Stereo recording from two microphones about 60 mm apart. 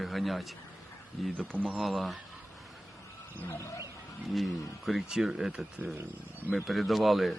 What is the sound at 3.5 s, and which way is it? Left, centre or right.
Speech, left.